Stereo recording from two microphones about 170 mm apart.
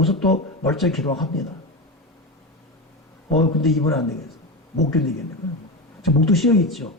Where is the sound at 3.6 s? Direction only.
Centre (ahead or behind).